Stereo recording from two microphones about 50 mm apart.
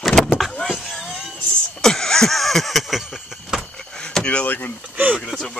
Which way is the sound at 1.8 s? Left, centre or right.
Centre.